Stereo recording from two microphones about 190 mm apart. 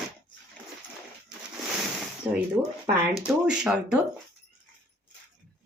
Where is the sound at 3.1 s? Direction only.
5° right (ahead or behind).